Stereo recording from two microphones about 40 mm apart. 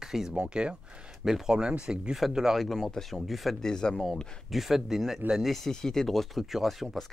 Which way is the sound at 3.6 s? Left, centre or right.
Centre.